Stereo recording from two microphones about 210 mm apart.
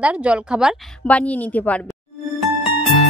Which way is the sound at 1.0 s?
5° left (ahead or behind).